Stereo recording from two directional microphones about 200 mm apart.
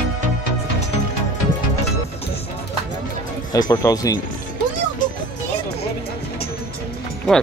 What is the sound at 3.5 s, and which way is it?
Speech, 20° left (ahead or behind).